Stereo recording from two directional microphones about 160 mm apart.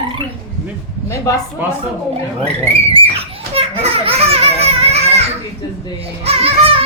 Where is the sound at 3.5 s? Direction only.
35° right (ahead or behind).